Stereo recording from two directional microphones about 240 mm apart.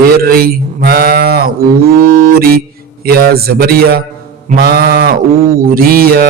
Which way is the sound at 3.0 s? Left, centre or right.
Right.